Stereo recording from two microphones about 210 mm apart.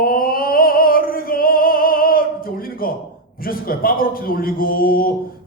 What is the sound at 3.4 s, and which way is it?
A man's voice, 45° left (ahead or behind).